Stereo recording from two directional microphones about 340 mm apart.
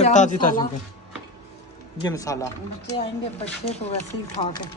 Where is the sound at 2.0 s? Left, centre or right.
Centre.